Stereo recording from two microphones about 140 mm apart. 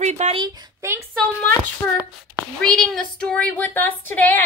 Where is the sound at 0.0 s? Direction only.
55° right (ahead or behind).